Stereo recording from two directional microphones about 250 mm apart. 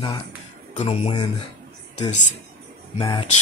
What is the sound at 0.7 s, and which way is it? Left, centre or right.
Speech, left.